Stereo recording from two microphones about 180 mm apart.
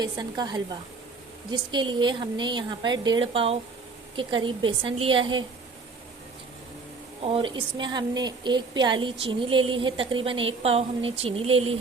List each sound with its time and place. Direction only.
0.0 s a woman's voice: 25° right (ahead or behind)
7.3 s a woman's voice: 30° right (ahead or behind)